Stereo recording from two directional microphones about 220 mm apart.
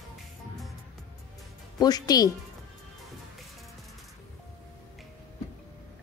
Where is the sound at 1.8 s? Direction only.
15° left (ahead or behind).